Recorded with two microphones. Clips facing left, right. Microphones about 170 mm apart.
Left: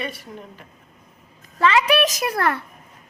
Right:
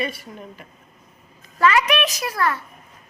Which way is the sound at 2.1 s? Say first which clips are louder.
Left 1 dB; 50° left (ahead or behind).